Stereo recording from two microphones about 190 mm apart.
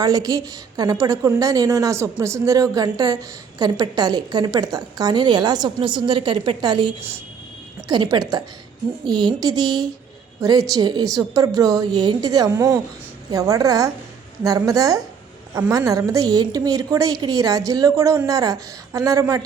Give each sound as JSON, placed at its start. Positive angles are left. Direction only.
{"t": 0.0, "sound": "a woman's voice", "side_deg": -20}